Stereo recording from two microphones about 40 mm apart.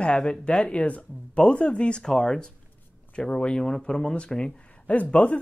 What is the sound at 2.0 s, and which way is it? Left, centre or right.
Speech, centre.